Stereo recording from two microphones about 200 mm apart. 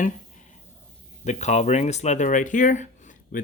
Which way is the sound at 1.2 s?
35° left (ahead or behind).